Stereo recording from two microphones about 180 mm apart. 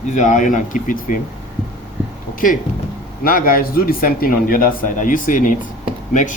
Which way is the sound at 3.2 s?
55° left (ahead or behind).